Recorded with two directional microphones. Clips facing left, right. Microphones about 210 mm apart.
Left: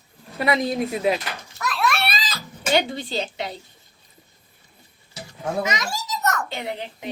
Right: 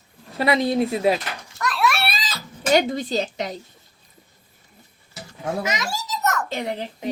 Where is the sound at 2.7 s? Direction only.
40° right (ahead or behind).